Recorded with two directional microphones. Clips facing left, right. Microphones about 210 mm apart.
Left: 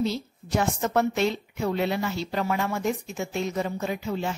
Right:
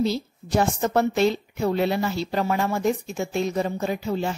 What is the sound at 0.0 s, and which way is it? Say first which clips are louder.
A woman's voice: right 3 dB; 35° right (ahead or behind).